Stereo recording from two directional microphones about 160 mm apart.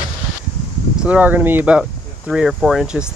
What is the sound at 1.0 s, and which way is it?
Speech, 10° right (ahead or behind).